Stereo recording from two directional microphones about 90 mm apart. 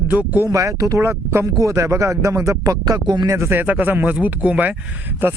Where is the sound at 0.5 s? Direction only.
40° right (ahead or behind).